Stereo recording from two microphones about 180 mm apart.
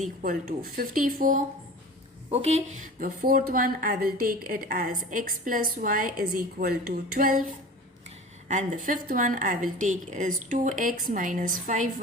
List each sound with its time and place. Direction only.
0.0 s a woman's voice: 50° right (ahead or behind)
2.3 s a woman's voice: 35° right (ahead or behind); by 7.4 s 50° right (ahead or behind)
8.4 s a woman's voice: 45° right (ahead or behind)